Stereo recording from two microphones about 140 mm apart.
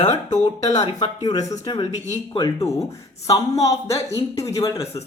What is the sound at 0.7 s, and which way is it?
Speech, 25° left (ahead or behind).